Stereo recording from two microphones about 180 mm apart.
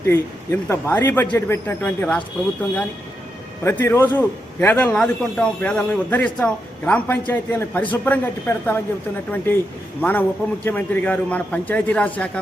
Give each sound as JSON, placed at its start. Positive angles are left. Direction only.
{"t": 0.0, "sound": "speech", "side_deg": 15}
{"t": 3.6, "sound": "speech", "side_deg": 15}